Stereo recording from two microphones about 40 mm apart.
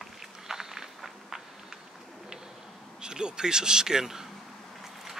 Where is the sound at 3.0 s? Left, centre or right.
Centre.